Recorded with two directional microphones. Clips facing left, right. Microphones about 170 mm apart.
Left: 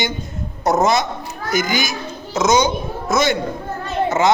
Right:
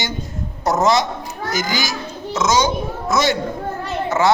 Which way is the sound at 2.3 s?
20° left (ahead or behind).